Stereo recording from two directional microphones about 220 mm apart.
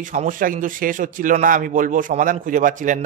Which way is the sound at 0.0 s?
35° right (ahead or behind).